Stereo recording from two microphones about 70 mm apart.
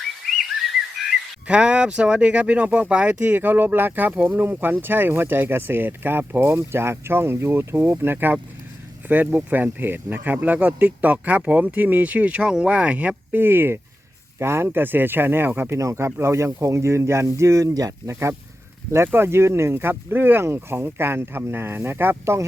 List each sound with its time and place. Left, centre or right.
1.5 s speech: centre
13.4 s speech: right
15.8 s speech: right
18.1 s speech: right